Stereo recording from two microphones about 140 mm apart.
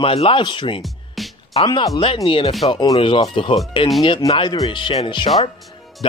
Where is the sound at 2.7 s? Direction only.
30° left (ahead or behind).